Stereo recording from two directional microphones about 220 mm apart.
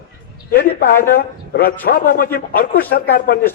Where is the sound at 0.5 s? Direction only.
45° left (ahead or behind).